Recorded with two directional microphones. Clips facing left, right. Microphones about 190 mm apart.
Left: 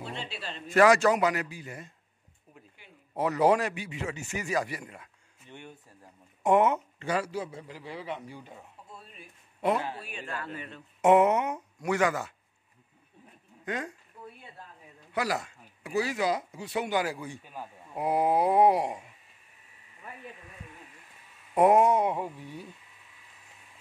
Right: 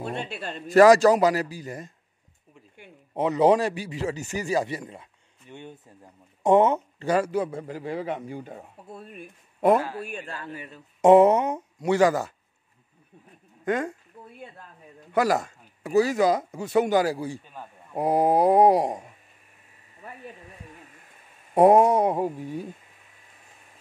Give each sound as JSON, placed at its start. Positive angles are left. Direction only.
{"t": 0.0, "sound": "speech", "side_deg": -50}
{"t": 0.7, "sound": "speech", "side_deg": -35}
{"t": 2.8, "sound": "a sound", "side_deg": -50}
{"t": 3.2, "sound": "speech", "side_deg": -20}
{"t": 6.4, "sound": "a man's voice", "side_deg": -30}
{"t": 10.3, "sound": "speech", "side_deg": -15}
{"t": 11.0, "sound": "speech", "side_deg": -35}
{"t": 13.7, "sound": "a man's voice", "side_deg": -50}
{"t": 15.1, "sound": "speech", "side_deg": -45}
{"t": 21.5, "sound": "speech", "side_deg": -35}